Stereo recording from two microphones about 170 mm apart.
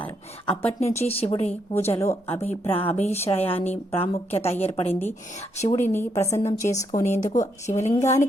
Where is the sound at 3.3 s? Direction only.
10° left (ahead or behind).